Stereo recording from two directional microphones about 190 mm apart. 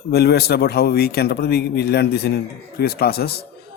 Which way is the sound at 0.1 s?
60° left (ahead or behind).